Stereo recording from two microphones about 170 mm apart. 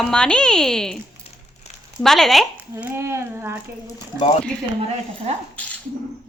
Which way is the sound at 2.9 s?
15° right (ahead or behind).